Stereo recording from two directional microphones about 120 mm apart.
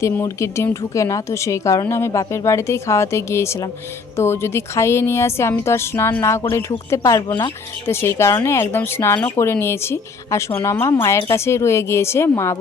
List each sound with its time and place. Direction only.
0.0 s a woman's voice: 25° left (ahead or behind)
7.3 s speech: 40° left (ahead or behind)
7.9 s a woman's voice: 20° left (ahead or behind)